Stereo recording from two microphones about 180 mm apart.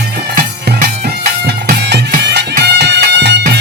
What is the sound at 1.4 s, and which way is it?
Bagpipes, 65° right (ahead or behind).